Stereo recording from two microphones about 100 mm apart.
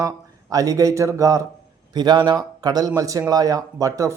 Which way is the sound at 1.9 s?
45° right (ahead or behind).